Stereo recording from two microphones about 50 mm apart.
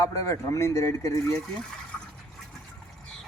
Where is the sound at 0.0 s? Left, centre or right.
Left.